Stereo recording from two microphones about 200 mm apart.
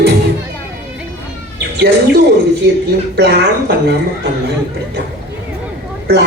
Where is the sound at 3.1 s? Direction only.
55° right (ahead or behind).